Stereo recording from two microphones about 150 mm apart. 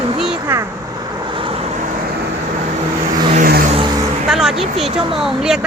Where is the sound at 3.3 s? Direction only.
70° right (ahead or behind).